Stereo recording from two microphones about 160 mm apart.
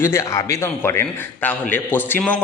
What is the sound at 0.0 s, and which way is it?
Speech, 15° left (ahead or behind).